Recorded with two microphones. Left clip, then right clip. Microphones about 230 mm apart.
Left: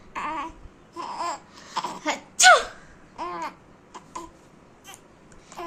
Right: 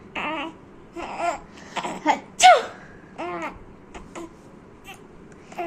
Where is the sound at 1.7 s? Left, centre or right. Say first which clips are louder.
Right 1 dB; centre.